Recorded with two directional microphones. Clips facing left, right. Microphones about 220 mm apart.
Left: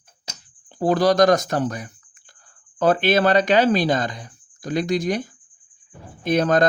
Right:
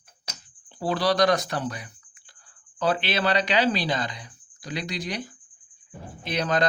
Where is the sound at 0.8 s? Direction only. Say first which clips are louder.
Left 6 dB; 45° left (ahead or behind).